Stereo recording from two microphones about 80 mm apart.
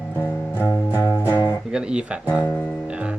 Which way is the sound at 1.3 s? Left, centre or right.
Left.